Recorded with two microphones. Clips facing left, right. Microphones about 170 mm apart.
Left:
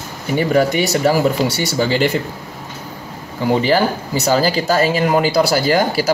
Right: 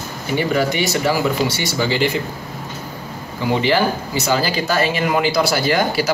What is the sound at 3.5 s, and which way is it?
Speech, 40° left (ahead or behind).